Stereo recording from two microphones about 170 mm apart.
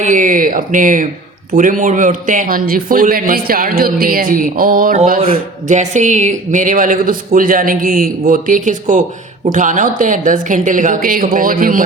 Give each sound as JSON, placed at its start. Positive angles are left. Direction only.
{"t": 0.0, "sound": "speech", "side_deg": -50}
{"t": 5.2, "sound": "speech", "side_deg": -40}